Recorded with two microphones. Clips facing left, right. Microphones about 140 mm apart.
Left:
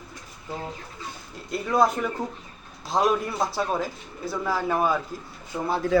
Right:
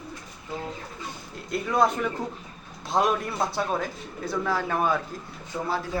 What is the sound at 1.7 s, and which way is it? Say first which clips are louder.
Speech: left 1 dB; centre (ahead or behind).